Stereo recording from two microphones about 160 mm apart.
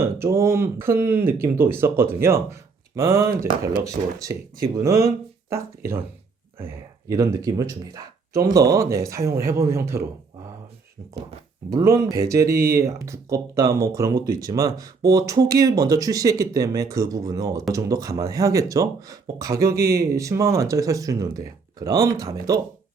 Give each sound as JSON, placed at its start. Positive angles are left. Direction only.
{"t": 0.0, "sound": "speech", "side_deg": -15}
{"t": 11.7, "sound": "speech", "side_deg": -20}